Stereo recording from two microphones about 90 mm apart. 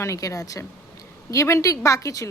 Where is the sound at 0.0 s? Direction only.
35° left (ahead or behind).